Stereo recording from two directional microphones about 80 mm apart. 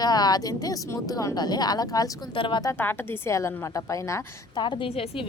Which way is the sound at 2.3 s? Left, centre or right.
Left.